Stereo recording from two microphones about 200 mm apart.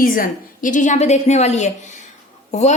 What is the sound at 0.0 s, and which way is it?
A woman's voice, 45° left (ahead or behind).